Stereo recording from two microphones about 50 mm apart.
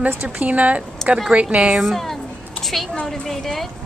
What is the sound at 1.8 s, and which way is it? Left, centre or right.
A woman's voice, centre.